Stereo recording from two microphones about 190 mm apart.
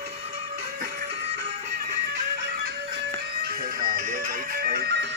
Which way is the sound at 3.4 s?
50° right (ahead or behind).